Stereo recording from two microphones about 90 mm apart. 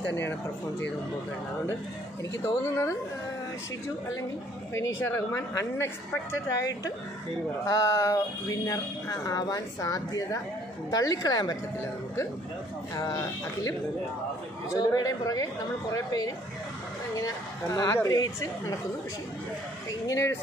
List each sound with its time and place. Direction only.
0.1 s speech: 25° left (ahead or behind)
2.4 s speech: 30° left (ahead or behind)
4.7 s speech: 30° left (ahead or behind)
7.6 s speech: 35° left (ahead or behind)
12.9 s speech: 40° left (ahead or behind)
14.8 s speech: 45° left (ahead or behind)
20.1 s speech: 35° left (ahead or behind)